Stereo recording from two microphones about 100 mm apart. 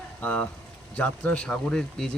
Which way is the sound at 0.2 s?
15° left (ahead or behind).